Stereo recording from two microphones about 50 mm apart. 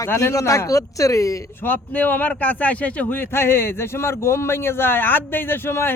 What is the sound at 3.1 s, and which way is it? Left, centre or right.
Speech, left.